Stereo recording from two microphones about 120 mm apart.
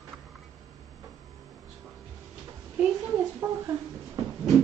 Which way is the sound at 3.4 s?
30° right (ahead or behind).